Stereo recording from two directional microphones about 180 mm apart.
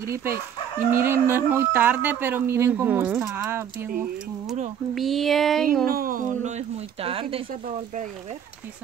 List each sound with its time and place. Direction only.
0.1 s speech: 10° right (ahead or behind)
4.9 s a sound: centre (ahead or behind)
5.9 s speech: 50° right (ahead or behind); by 7.4 s 30° right (ahead or behind)